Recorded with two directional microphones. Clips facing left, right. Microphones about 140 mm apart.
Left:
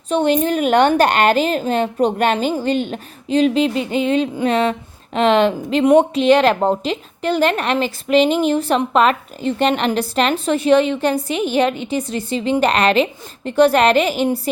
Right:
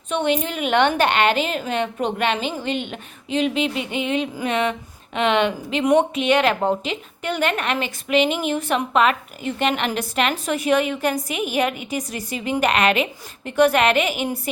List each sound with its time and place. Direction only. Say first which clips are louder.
0.1 s speech: left 6 dB; 35° left (ahead or behind)